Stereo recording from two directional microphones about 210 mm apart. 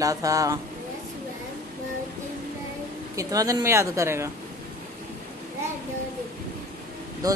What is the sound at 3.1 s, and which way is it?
Speech, 15° right (ahead or behind).